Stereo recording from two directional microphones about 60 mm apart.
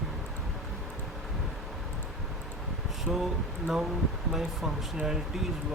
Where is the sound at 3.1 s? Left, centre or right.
Right.